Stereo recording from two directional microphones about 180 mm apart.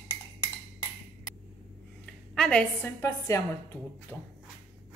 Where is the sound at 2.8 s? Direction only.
20° left (ahead or behind).